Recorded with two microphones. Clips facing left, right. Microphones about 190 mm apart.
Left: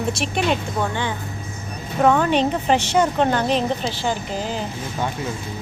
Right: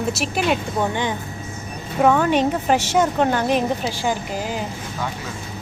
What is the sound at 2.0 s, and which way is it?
A woman's voice, 5° right (ahead or behind).